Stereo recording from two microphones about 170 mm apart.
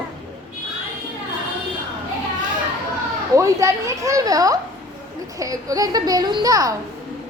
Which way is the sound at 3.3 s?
20° right (ahead or behind).